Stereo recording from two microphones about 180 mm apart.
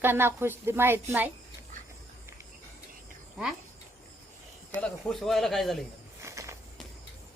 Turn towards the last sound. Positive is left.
turn(degrees=-15)  # may be behind; listen again after turning